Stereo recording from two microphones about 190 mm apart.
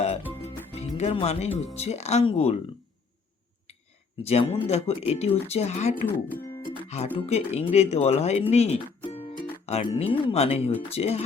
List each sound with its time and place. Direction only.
0.4 s speech: 35° left (ahead or behind)
4.2 s speech: 30° left (ahead or behind)
6.1 s speech: 10° left (ahead or behind)
6.7 s speech: 30° left (ahead or behind)